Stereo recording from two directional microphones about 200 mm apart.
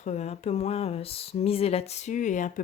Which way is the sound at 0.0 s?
35° left (ahead or behind).